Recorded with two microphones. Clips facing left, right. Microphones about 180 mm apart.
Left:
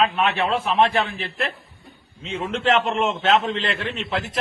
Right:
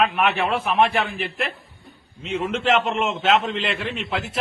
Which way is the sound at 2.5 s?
5° right (ahead or behind).